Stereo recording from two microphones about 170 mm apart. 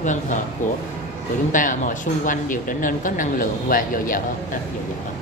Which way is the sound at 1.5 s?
50° left (ahead or behind).